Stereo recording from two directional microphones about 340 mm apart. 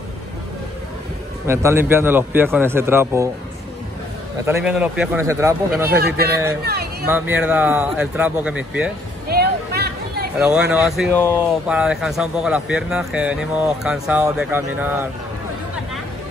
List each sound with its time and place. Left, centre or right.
1.5 s a man's voice: centre
4.5 s speech: centre
5.9 s speech: right
6.6 s a sound: right
7.1 s speech: centre
9.3 s a sound: right
10.3 s speech: centre